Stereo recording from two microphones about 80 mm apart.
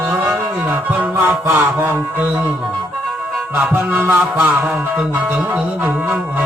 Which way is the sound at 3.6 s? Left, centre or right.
Right.